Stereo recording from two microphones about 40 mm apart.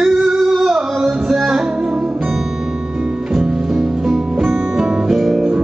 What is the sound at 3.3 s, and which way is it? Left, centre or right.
Music, centre.